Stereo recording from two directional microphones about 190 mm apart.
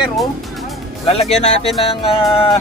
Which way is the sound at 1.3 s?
35° left (ahead or behind).